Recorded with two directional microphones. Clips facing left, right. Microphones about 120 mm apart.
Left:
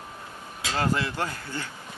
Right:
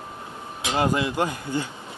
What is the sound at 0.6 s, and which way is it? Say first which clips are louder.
Speech: right 4 dB; 20° right (ahead or behind).